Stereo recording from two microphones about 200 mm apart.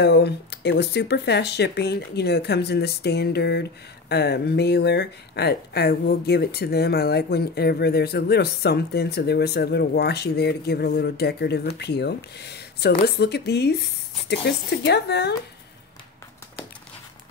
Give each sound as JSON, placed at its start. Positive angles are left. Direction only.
{"t": 0.0, "sound": "speech", "side_deg": 55}